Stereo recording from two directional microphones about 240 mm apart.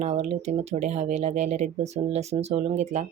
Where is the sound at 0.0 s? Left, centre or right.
Right.